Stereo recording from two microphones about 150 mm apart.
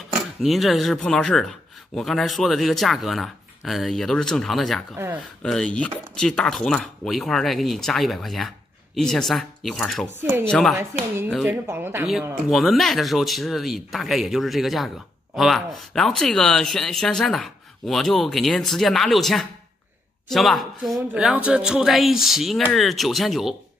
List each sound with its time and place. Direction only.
0.4 s speech: centre (ahead or behind)
4.9 s speech: 15° right (ahead or behind)
5.4 s speech: 5° left (ahead or behind)
11.4 s speech: 10° right (ahead or behind)
12.1 s speech: centre (ahead or behind)